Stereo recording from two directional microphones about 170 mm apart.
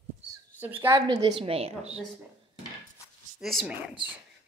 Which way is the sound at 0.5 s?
10° right (ahead or behind).